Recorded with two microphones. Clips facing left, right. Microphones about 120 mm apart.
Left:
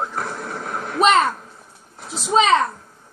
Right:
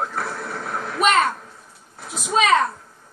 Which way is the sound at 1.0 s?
30° left (ahead or behind).